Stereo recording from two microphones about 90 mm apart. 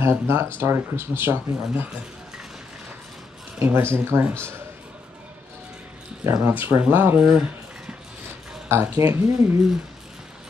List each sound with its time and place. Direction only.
0.0 s speech: 25° right (ahead or behind)
3.5 s speech: 25° right (ahead or behind)
6.4 s speech: 25° right (ahead or behind)
7.2 s speech: 10° right (ahead or behind)
8.6 s speech: 30° right (ahead or behind)